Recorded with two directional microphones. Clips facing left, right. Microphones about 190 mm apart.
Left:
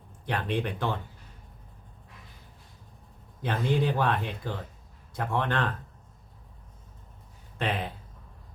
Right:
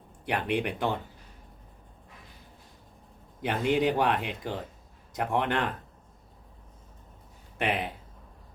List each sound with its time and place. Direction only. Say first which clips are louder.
0.3 s speech: right 1 dB; 15° right (ahead or behind)
3.4 s speech: right 2 dB; 15° right (ahead or behind)
7.6 s speech: right 1 dB; 15° right (ahead or behind)